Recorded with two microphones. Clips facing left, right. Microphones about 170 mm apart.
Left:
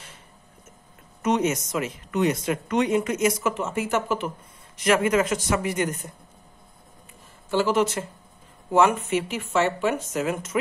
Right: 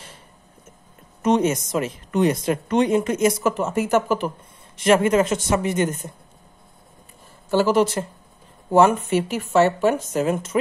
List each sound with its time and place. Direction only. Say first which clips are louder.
1.2 s speech: right 4 dB; 30° right (ahead or behind)
4.7 s speech: right 4 dB; 30° right (ahead or behind)
7.5 s speech: right 4 dB; 40° right (ahead or behind)